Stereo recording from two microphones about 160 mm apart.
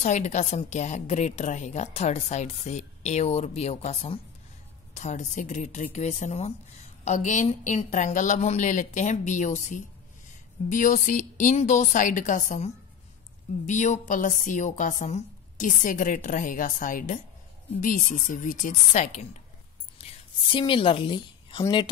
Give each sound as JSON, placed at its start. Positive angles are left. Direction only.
{"t": 0.0, "sound": "a woman's voice", "side_deg": 45}
{"t": 20.0, "sound": "whispering", "side_deg": 40}
{"t": 20.5, "sound": "a woman's voice", "side_deg": 35}